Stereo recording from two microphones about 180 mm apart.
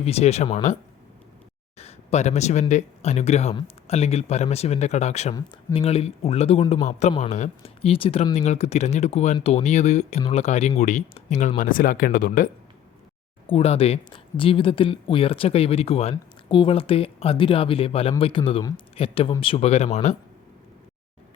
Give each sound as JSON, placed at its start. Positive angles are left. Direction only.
{"t": 0.0, "sound": "speech", "side_deg": 35}
{"t": 1.8, "sound": "speech", "side_deg": 35}
{"t": 13.5, "sound": "speech", "side_deg": 35}